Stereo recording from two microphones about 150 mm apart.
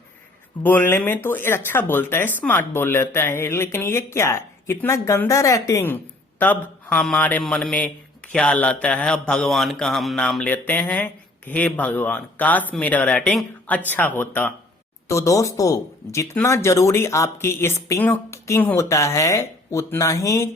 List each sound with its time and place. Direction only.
0.6 s a man's voice: 10° left (ahead or behind)